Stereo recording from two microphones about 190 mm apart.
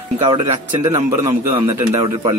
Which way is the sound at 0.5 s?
35° right (ahead or behind).